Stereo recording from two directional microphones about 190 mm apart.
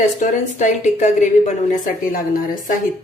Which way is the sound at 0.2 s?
40° left (ahead or behind).